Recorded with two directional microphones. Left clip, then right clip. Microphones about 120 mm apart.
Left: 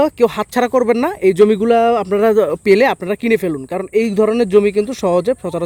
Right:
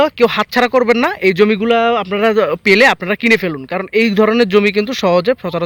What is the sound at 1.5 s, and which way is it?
Speech, 55° left (ahead or behind).